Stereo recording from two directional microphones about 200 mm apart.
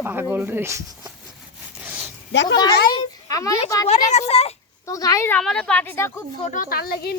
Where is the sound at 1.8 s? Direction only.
5° right (ahead or behind).